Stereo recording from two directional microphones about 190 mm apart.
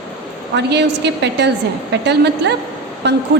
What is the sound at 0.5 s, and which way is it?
A woman's voice, 65° right (ahead or behind).